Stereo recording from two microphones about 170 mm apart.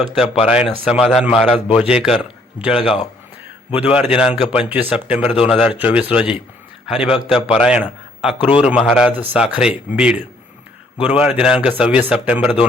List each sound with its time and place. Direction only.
0.2 s speech: 5° right (ahead or behind)
2.8 s a man's voice: 35° left (ahead or behind)
3.8 s a man's voice: 5° right (ahead or behind)